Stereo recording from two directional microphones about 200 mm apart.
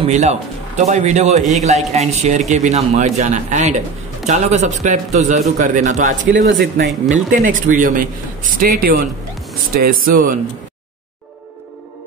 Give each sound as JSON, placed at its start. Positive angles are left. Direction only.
{"t": 0.0, "sound": "a man's voice", "side_deg": -35}
{"t": 6.2, "sound": "speech", "side_deg": -65}
{"t": 7.2, "sound": "a man's voice", "side_deg": -40}